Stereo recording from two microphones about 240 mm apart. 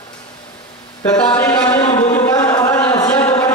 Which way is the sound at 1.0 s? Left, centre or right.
Centre.